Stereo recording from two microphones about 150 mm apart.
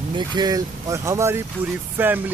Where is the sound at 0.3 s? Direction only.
25° right (ahead or behind).